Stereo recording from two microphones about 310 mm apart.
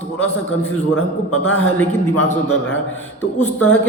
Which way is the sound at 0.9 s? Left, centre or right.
Left.